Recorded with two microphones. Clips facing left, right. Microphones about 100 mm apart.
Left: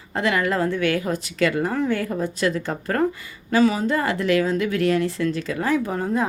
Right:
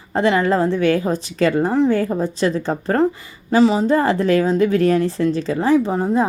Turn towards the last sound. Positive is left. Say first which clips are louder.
# right 6 dB
turn(degrees=-20)  # may be behind; listen again after turning